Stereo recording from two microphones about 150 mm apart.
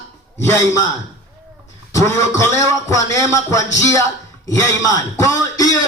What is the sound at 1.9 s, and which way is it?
A man's voice, 20° left (ahead or behind).